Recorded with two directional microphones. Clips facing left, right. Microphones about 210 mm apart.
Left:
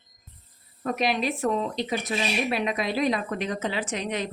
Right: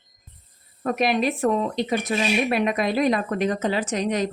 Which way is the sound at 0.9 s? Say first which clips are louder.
Right 4 dB; 50° right (ahead or behind).